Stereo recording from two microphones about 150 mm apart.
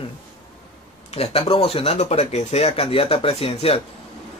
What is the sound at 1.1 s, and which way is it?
Speech, 40° left (ahead or behind).